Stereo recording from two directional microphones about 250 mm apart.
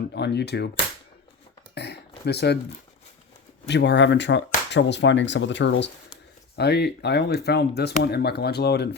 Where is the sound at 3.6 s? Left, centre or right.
Left.